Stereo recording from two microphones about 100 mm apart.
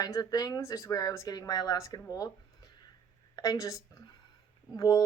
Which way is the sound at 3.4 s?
35° left (ahead or behind).